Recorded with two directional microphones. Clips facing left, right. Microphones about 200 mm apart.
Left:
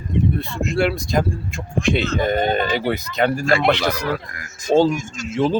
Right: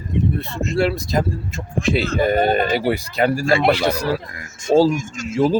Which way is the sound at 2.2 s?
10° right (ahead or behind).